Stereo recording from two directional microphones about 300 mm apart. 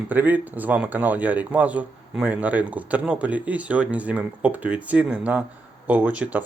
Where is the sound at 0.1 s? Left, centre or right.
Centre.